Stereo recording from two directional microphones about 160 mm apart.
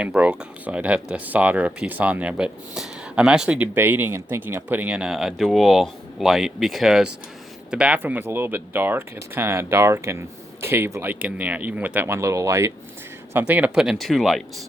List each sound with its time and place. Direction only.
0.0 s speech: 5° right (ahead or behind)
13.5 s speech: 5° right (ahead or behind)